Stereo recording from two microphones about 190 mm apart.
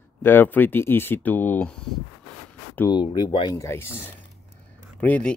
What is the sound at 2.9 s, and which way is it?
Speech, 20° left (ahead or behind).